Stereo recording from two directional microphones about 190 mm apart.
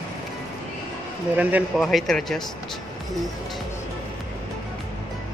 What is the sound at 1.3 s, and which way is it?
Speech, 5° right (ahead or behind).